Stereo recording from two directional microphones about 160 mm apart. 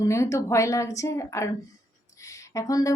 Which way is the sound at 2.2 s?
20° left (ahead or behind).